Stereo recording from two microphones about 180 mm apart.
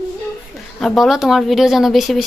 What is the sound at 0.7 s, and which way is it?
A woman's voice, centre (ahead or behind).